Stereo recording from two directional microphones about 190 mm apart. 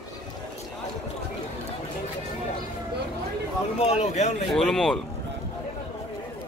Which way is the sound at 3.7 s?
35° left (ahead or behind).